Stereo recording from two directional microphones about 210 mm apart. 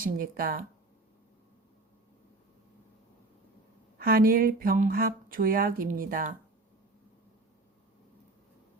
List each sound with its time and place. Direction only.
0.0 s speech: 40° right (ahead or behind)
3.9 s speech: 45° right (ahead or behind)